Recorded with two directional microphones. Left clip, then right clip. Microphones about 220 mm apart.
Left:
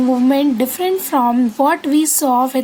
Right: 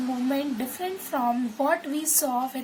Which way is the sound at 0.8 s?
45° left (ahead or behind).